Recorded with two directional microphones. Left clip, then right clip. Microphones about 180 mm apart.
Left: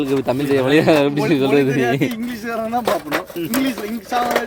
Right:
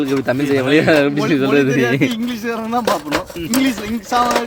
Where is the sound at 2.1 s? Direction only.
45° right (ahead or behind).